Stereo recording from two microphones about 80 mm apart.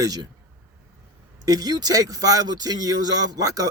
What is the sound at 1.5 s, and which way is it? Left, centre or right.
Speech, right.